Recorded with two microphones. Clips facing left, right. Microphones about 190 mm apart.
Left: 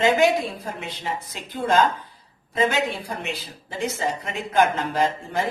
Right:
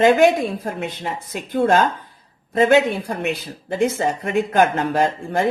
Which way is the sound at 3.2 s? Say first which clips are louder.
Right 7 dB; 60° right (ahead or behind).